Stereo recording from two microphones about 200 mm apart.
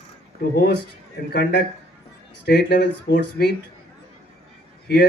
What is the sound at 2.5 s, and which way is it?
Speech, 60° left (ahead or behind).